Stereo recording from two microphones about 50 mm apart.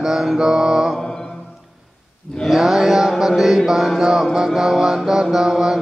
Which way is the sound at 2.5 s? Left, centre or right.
Centre.